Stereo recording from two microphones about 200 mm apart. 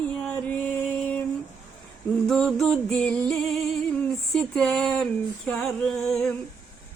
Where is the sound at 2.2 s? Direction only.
Centre (ahead or behind).